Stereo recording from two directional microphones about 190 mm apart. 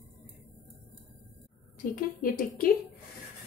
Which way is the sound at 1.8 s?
50° left (ahead or behind).